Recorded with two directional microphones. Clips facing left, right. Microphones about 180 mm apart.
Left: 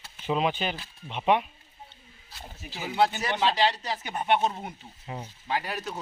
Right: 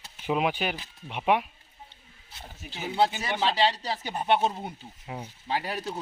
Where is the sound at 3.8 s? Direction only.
30° right (ahead or behind).